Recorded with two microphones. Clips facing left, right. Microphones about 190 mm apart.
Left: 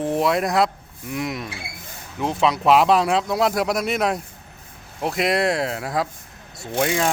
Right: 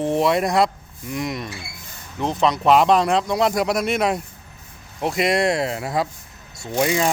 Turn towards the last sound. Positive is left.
turn(degrees=0)  # may be behind; listen again after turning